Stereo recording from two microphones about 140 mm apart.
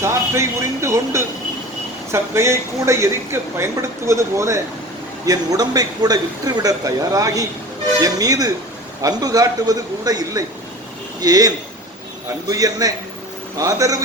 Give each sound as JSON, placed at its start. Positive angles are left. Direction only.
{"t": 0.0, "sound": "a man's voice", "side_deg": -20}